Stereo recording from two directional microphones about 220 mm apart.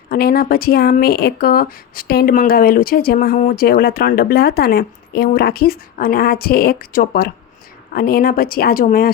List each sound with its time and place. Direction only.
0.1 s speech: 45° left (ahead or behind)